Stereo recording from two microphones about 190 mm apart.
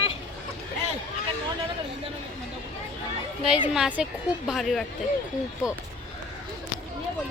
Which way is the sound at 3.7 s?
5° right (ahead or behind).